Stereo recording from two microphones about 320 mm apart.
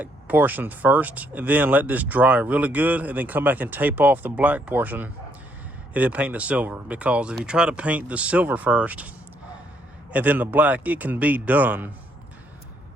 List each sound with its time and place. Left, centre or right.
0.0 s speech: centre